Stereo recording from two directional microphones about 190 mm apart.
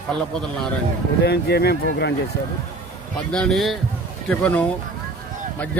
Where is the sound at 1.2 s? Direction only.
55° left (ahead or behind).